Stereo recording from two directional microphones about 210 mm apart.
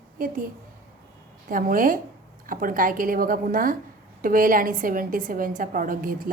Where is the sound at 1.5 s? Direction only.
40° right (ahead or behind).